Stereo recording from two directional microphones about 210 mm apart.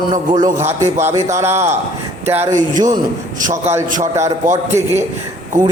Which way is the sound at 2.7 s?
35° right (ahead or behind).